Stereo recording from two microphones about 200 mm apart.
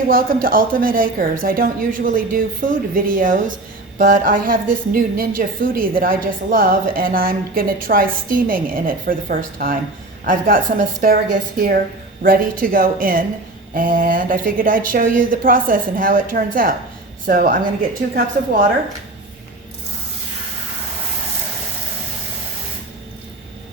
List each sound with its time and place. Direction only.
0.1 s a woman's voice: 45° right (ahead or behind)